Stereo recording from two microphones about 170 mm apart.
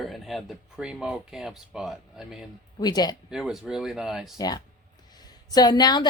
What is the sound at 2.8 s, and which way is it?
Speech, 25° left (ahead or behind).